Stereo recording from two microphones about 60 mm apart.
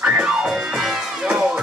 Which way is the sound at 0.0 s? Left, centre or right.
Centre.